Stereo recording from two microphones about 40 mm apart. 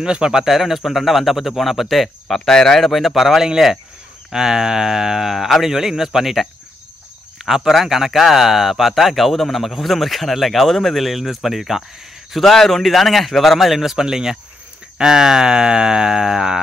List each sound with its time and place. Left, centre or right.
0.0 s speech: right
0.5 s speech: centre
2.9 s speech: centre
7.4 s speech: centre